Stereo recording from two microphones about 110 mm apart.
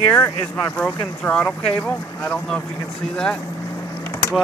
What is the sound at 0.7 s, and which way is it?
Speech, 10° left (ahead or behind).